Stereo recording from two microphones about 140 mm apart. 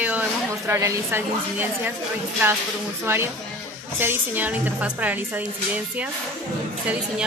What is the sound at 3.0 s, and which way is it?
A woman's voice, 15° right (ahead or behind).